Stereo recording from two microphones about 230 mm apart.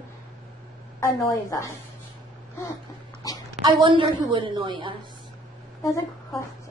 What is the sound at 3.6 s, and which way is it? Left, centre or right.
A woman's voice, right.